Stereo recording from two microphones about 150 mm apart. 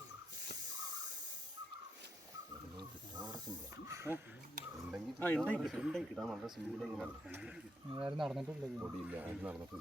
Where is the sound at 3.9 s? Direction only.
20° right (ahead or behind).